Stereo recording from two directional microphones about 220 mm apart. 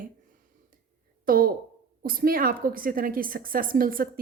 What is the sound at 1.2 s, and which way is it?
A woman's voice, 40° right (ahead or behind).